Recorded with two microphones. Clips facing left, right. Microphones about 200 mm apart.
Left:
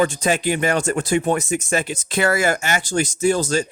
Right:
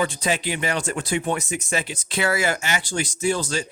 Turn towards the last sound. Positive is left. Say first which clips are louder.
# left 5 dB
turn(degrees=45)  # may be behind; listen again after turning